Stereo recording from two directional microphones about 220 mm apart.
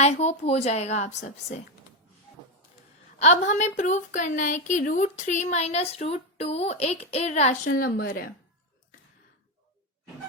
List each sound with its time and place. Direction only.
0.0 s a woman's voice: 30° left (ahead or behind)
3.2 s a woman's voice: 30° left (ahead or behind)